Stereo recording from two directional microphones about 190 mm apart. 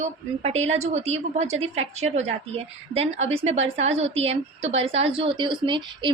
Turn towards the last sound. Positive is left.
turn(degrees=-25)  # may be behind; listen again after turning